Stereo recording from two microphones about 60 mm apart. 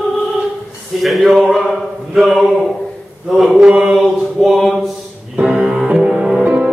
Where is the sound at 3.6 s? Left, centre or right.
Centre.